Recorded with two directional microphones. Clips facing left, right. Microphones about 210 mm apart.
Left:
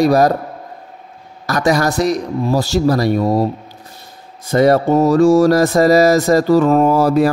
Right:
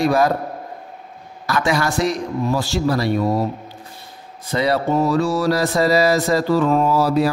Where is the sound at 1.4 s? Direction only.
40° left (ahead or behind).